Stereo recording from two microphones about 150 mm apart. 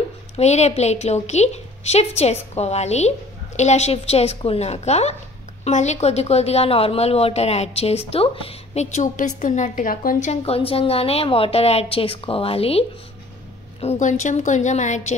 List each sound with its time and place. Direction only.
0.4 s speech: 45° left (ahead or behind)
10.3 s a woman's voice: 40° left (ahead or behind)